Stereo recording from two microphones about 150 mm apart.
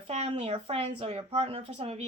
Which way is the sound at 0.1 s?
50° right (ahead or behind).